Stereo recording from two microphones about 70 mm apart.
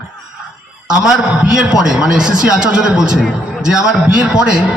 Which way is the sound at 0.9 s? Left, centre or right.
Centre.